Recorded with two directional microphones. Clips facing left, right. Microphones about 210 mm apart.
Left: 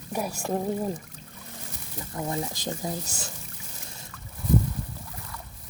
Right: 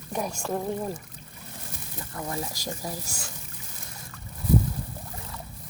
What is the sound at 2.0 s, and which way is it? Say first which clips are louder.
Speech: left 3 dB; 20° left (ahead or behind).